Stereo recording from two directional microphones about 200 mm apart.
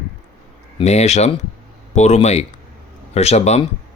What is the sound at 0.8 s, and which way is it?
Speech, 35° left (ahead or behind).